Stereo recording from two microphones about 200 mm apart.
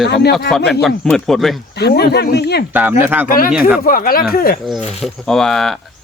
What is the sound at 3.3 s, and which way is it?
Speech, 45° left (ahead or behind).